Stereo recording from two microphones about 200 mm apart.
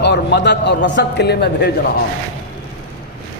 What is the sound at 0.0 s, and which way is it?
A man's voice, 60° left (ahead or behind).